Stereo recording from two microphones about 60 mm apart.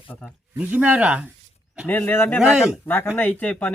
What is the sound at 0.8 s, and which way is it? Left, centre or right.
Speech, right.